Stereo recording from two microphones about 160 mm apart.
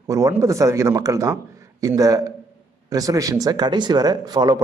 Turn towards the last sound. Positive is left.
turn(degrees=-25)  # may be behind; listen again after turning